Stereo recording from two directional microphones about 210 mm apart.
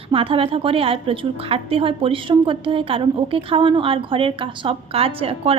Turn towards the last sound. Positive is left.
turn(degrees=-25)  # may be behind; listen again after turning